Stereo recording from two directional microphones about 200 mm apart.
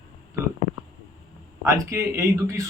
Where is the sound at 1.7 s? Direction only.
15° right (ahead or behind).